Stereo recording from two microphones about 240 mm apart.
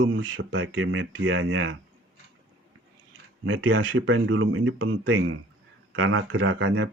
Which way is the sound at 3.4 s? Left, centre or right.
Right.